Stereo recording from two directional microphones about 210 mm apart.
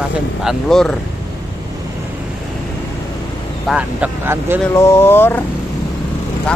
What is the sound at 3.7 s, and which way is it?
Speech, 5° right (ahead or behind).